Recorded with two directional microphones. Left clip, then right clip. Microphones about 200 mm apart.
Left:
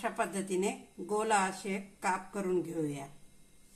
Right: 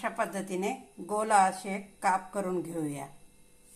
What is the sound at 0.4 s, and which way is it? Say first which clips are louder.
Speech: right 1 dB; 15° right (ahead or behind).